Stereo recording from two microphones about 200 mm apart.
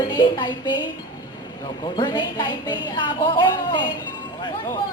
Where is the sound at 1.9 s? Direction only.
20° left (ahead or behind).